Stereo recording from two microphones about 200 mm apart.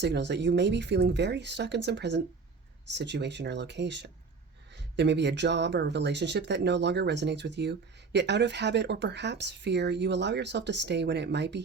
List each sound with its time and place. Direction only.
0.0 s speech: 60° right (ahead or behind)